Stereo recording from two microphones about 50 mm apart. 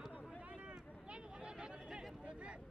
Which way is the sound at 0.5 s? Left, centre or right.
Right.